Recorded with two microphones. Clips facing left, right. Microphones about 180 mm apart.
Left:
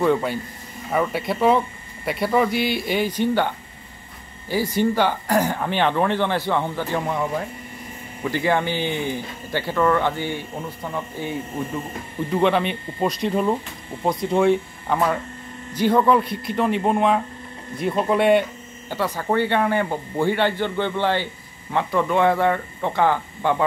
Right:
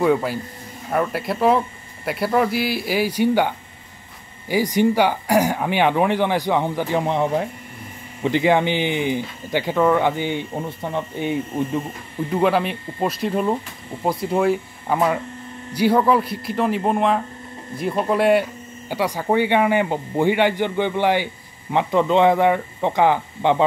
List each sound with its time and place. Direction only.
0.0 s a man's voice: 5° right (ahead or behind); by 11.3 s 20° right (ahead or behind)
12.3 s speech: 5° right (ahead or behind)
18.9 s a man's voice: 15° right (ahead or behind)